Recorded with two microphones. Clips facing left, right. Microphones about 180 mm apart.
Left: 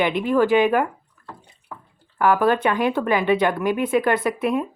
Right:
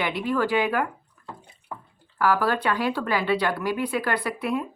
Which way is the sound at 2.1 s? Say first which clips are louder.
Left 5 dB; 20° left (ahead or behind).